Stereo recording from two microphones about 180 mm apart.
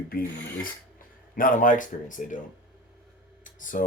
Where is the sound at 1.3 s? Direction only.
50° left (ahead or behind).